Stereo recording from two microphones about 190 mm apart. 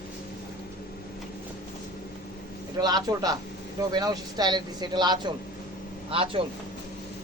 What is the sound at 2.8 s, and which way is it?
Speech, 20° right (ahead or behind).